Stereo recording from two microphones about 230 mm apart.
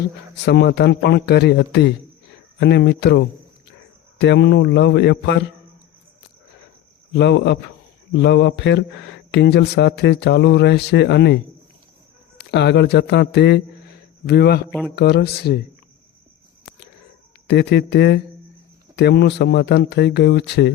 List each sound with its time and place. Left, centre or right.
0.4 s speech: left
7.1 s speech: left
12.4 s speech: left
14.7 s speech: centre
14.9 s speech: left
17.5 s speech: left